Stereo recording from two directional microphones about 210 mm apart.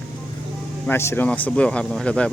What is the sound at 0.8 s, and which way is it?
Speech, 10° left (ahead or behind).